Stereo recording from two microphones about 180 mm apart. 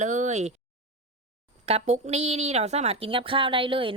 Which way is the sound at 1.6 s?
35° right (ahead or behind).